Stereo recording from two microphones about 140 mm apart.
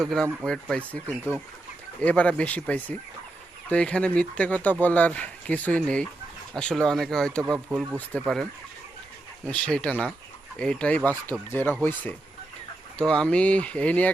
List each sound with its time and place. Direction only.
0.0 s speech: 5° left (ahead or behind)
7.4 s speech: 20° right (ahead or behind)
8.1 s speech: 10° left (ahead or behind)
9.5 s speech: 10° left (ahead or behind)